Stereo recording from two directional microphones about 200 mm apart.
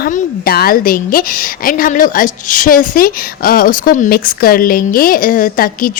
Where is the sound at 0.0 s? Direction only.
50° left (ahead or behind).